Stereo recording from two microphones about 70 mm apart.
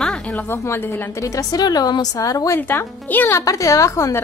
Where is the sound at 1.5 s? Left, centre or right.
Left.